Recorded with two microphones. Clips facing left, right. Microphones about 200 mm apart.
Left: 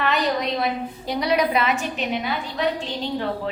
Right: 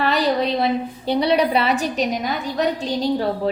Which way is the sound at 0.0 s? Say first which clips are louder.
Right 3 dB; 35° right (ahead or behind).